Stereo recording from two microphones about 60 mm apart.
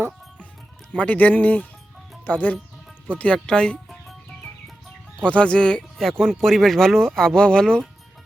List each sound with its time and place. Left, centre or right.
0.9 s speech: left
5.2 s speech: centre